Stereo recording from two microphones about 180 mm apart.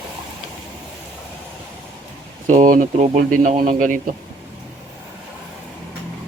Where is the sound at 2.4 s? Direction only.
45° right (ahead or behind).